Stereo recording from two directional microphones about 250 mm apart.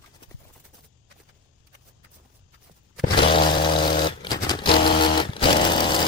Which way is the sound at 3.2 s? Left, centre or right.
Left.